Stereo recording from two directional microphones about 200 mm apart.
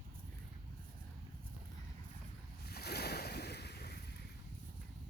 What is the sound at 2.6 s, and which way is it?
Boat, 55° left (ahead or behind).